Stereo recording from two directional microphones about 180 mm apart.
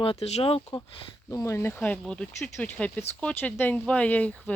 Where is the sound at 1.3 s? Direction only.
15° left (ahead or behind).